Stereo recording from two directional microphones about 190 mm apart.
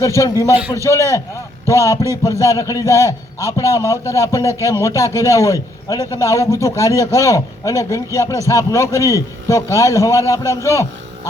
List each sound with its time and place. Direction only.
0.2 s a man's voice: 15° left (ahead or behind)